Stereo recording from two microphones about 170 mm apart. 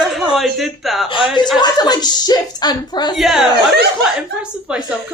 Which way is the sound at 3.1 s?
Centre (ahead or behind).